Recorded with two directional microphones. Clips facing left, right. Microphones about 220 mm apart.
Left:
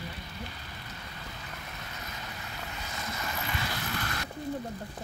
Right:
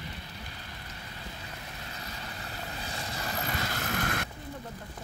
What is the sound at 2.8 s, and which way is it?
Vehicle, 30° right (ahead or behind).